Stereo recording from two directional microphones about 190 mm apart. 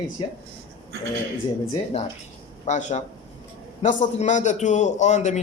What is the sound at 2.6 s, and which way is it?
A man's voice, 40° left (ahead or behind).